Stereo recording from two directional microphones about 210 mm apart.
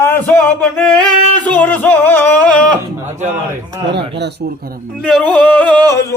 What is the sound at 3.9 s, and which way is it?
Speech, 55° right (ahead or behind).